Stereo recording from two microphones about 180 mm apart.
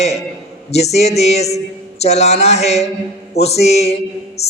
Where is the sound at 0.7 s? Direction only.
35° left (ahead or behind).